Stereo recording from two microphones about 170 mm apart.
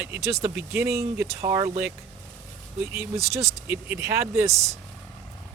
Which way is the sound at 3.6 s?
10° right (ahead or behind).